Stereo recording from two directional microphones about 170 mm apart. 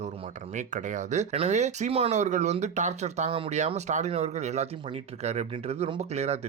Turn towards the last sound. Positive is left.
turn(degrees=-40)  # may be behind; listen again after turning